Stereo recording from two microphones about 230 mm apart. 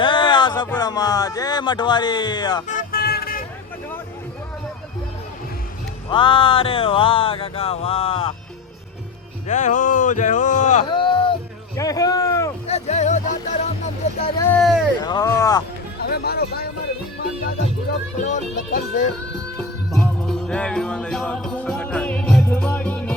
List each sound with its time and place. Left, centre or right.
0.0 s a sound: left
0.8 s speech: centre
2.6 s vehicle: left
6.1 s music: left
9.5 s speech: left
10.9 s a sound: left
12.6 s music: left
14.6 s speech: centre
15.0 s speech: centre
16.0 s a sound: left
18.2 s speech: left
19.5 s music: centre